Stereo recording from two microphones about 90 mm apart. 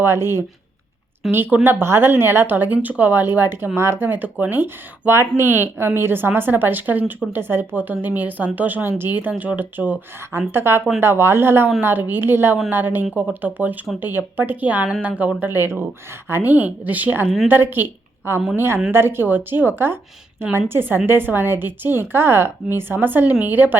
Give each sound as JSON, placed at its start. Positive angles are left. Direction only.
{"t": 0.0, "sound": "a woman's voice", "side_deg": -25}